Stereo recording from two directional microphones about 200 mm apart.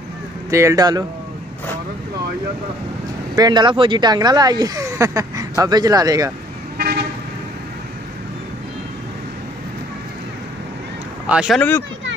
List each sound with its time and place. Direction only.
0.5 s speech: 15° right (ahead or behind)
3.3 s speech: 20° right (ahead or behind)
6.8 s toot: 50° right (ahead or behind)
11.2 s speech: 5° right (ahead or behind)